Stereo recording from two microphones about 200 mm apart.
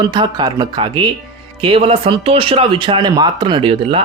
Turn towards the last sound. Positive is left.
turn(degrees=-25)  # may be behind; listen again after turning